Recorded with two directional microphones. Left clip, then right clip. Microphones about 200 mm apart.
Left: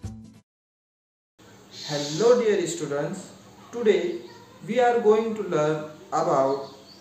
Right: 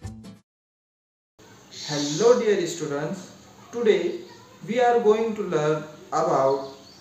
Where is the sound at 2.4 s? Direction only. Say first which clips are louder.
Even; 10° right (ahead or behind).